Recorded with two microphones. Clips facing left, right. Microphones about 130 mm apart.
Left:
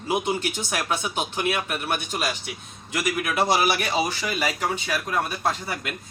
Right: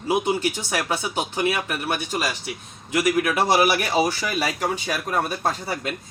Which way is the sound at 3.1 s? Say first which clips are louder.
Right 2 dB; 55° right (ahead or behind).